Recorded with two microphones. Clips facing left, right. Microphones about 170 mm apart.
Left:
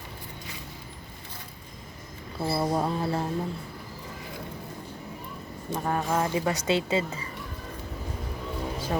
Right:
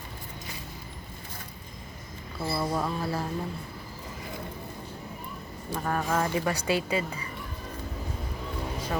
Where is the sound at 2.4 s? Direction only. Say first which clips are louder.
Left 3 dB; 30° left (ahead or behind).